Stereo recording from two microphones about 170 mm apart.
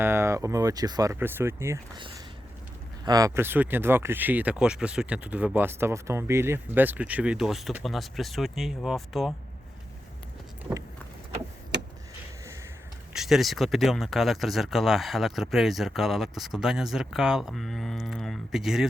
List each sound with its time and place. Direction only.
0.0 s speech: 15° right (ahead or behind)
3.0 s speech: 20° right (ahead or behind); by 9.3 s centre (ahead or behind)
13.1 s speech: centre (ahead or behind)